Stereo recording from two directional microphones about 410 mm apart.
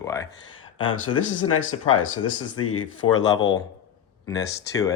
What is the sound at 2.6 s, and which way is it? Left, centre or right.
Speech, left.